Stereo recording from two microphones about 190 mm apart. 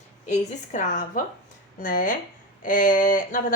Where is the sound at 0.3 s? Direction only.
40° left (ahead or behind).